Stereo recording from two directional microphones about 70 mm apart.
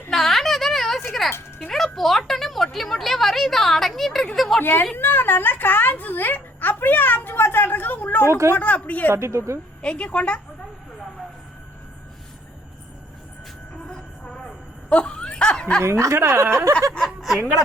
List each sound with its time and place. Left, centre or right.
0.1 s a sound: centre
1.5 s speech: centre
4.6 s a woman's voice: left
8.3 s speech: right
8.5 s speech: left
9.0 s speech: right
9.8 s a woman's voice: centre
13.9 s train: centre
14.8 s laughter: centre
15.8 s speech: right
17.2 s a sound: centre